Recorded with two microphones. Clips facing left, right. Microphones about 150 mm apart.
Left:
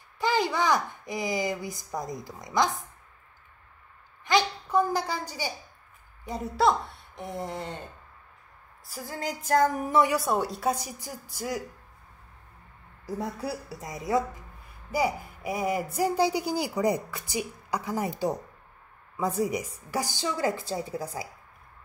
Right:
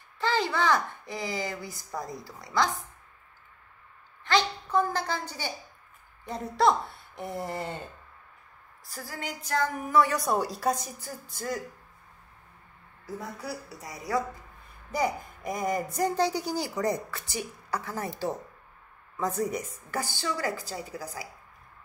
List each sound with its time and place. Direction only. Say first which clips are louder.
0.2 s speech: left 1 dB; 15° left (ahead or behind)
4.2 s a woman's voice: left 1 dB; 15° left (ahead or behind); by 7.8 s 5° right (ahead or behind)
9.2 s music: left 6 dB; 40° left (ahead or behind)
9.8 s a woman's voice: even; 20° left (ahead or behind)
10.1 s a woman's voice: left 1 dB; centre (ahead or behind)
10.8 s a child's voice: left 1 dB; 10° left (ahead or behind)
13.0 s a woman's voice: left 5 dB; 30° left (ahead or behind)
14.9 s a child's voice: left 1 dB; 10° left (ahead or behind); by 21.3 s 25° left (ahead or behind)